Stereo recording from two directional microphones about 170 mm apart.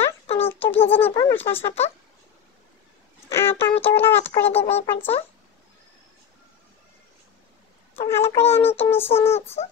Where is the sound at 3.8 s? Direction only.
10° left (ahead or behind).